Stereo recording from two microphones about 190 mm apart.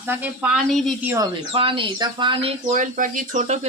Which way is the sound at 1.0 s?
10° right (ahead or behind).